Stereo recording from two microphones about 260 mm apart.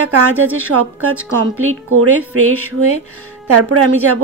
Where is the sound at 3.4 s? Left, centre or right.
Right.